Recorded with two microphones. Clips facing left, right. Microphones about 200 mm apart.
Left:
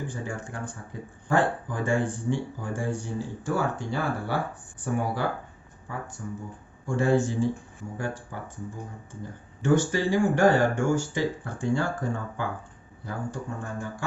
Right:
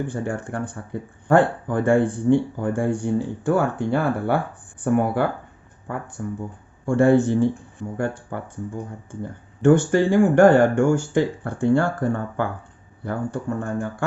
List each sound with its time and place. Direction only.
0.1 s speech: 60° right (ahead or behind)